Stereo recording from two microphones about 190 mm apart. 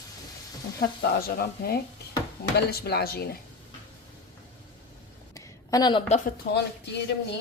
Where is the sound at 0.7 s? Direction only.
55° left (ahead or behind).